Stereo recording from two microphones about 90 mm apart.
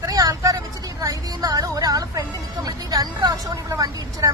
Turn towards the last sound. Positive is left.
turn(degrees=-40)  # may be behind; listen again after turning